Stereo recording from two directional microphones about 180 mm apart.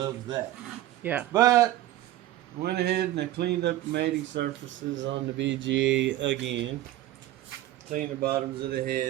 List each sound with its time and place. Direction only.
0.0 s speech: 25° right (ahead or behind)
1.0 s a man's voice: 10° right (ahead or behind)
2.6 s speech: 65° right (ahead or behind); by 6.4 s 90° right
7.9 s speech: 55° right (ahead or behind)